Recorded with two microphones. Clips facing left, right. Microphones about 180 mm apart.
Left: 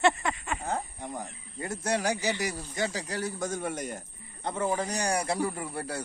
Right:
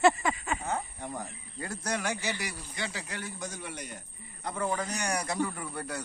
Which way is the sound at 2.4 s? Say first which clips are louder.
Left 7 dB; 45° left (ahead or behind).